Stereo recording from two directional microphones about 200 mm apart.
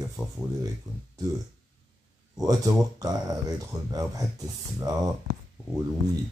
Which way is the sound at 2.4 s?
20° right (ahead or behind).